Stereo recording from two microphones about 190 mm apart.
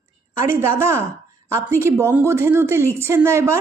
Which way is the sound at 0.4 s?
15° right (ahead or behind).